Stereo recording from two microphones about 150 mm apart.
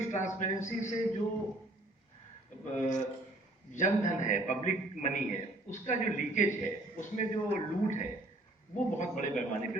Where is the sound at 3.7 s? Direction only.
55° left (ahead or behind).